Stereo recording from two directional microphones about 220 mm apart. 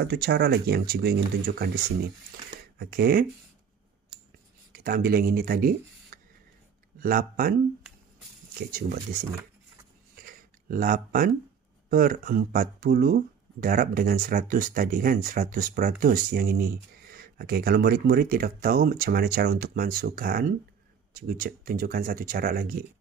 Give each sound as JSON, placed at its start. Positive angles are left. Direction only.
{"t": 0.0, "sound": "speech", "side_deg": -50}
{"t": 2.8, "sound": "speech", "side_deg": -45}
{"t": 4.7, "sound": "speech", "side_deg": -40}
{"t": 8.7, "sound": "speech", "side_deg": -40}
{"t": 10.1, "sound": "a sound", "side_deg": -40}
{"t": 11.9, "sound": "speech", "side_deg": -40}